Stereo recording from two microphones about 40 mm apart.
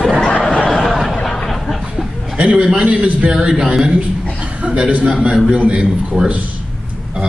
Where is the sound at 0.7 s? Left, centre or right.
Centre.